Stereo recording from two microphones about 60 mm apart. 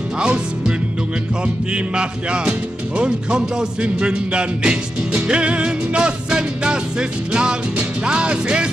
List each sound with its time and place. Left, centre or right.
0.2 s music: centre